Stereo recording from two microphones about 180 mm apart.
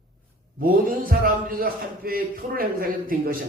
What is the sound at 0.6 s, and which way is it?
A man's voice, 55° right (ahead or behind).